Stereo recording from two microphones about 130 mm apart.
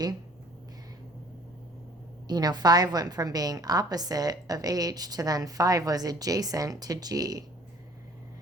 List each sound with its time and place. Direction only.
2.2 s a woman's voice: 30° right (ahead or behind)